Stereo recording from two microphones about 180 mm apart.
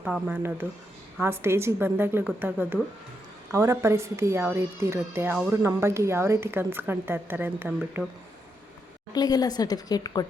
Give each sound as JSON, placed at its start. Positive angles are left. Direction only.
{"t": 0.0, "sound": "speech", "side_deg": -5}
{"t": 9.1, "sound": "a woman's voice", "side_deg": 20}